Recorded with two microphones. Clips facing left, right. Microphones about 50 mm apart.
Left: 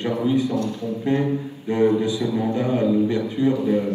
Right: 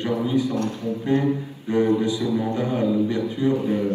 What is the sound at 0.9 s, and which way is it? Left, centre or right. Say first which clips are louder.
Speech: even; left.